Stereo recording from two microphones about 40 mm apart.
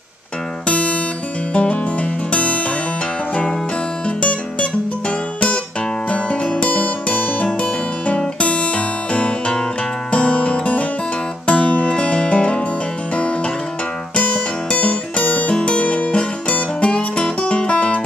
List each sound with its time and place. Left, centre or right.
0.7 s music: left
4.0 s music: left
7.4 s music: left
8.4 s guitar: left
10.1 s music: left